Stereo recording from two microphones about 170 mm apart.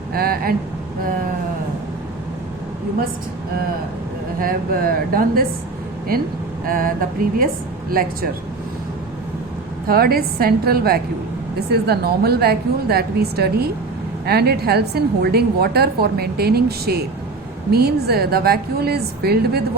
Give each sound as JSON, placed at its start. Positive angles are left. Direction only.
{"t": 0.1, "sound": "speech", "side_deg": -60}
{"t": 4.4, "sound": "a woman's voice", "side_deg": -60}
{"t": 6.7, "sound": "a woman's voice", "side_deg": -55}
{"t": 9.8, "sound": "a woman's voice", "side_deg": -60}